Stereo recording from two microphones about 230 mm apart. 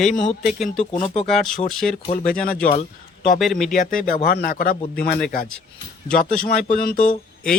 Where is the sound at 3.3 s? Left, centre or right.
Centre.